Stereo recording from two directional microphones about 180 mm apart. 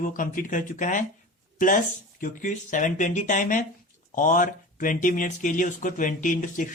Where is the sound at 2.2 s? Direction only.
45° left (ahead or behind).